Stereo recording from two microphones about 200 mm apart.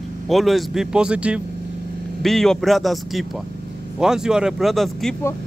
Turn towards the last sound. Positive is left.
turn(degrees=0)  # may be behind; listen again after turning